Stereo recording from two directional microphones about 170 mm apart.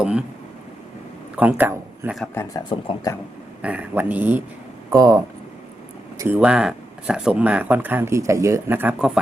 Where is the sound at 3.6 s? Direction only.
10° right (ahead or behind).